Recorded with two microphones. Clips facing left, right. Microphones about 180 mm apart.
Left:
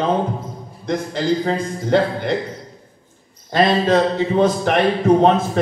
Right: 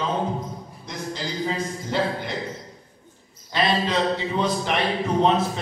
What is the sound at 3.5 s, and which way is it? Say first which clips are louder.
A man's voice: left 7 dB; 50° left (ahead or behind).